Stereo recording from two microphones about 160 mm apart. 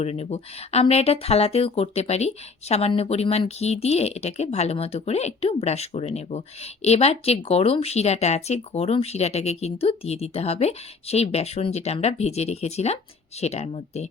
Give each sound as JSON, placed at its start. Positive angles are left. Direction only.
{"t": 0.0, "sound": "speech", "side_deg": 40}